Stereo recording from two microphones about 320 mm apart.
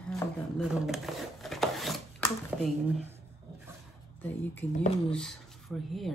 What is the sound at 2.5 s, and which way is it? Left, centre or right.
Speech, centre.